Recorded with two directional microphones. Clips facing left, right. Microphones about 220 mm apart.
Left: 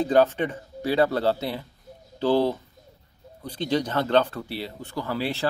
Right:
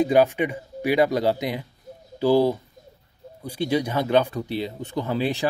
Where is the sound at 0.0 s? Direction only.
10° right (ahead or behind).